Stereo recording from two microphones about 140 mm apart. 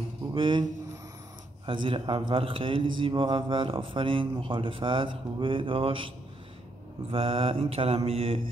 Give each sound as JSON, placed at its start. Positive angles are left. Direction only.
{"t": 0.3, "sound": "speech", "side_deg": -35}
{"t": 1.7, "sound": "speech", "side_deg": -35}
{"t": 7.1, "sound": "mantra", "side_deg": -40}